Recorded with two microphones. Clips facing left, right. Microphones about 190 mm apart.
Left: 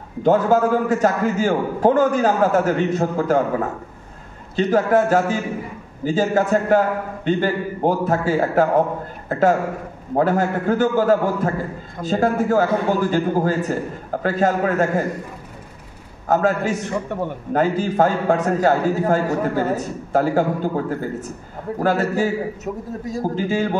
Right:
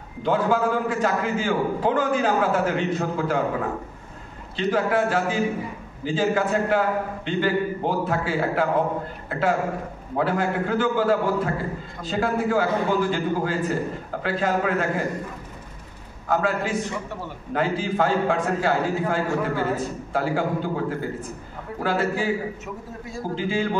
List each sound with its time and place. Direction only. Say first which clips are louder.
0.2 s a man's voice: left 6 dB; 45° left (ahead or behind)
4.6 s a man's voice: left 5 dB; 45° left (ahead or behind)
16.3 s a man's voice: left 5 dB; 45° left (ahead or behind)